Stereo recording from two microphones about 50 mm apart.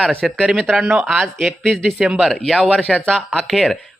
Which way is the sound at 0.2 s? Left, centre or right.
Centre.